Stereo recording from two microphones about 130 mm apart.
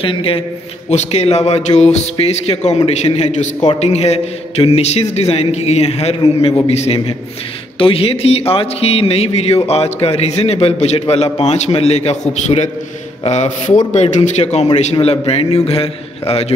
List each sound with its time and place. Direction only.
0.0 s a man's voice: 45° left (ahead or behind)
0.8 s a man's voice: 55° left (ahead or behind)